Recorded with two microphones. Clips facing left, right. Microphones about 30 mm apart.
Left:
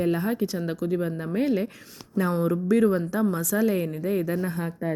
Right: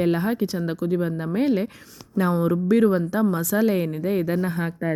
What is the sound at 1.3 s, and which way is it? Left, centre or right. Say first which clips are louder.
Speech: right 2 dB; right.